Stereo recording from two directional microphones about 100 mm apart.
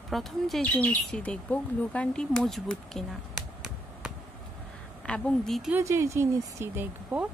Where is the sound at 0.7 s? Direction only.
15° left (ahead or behind).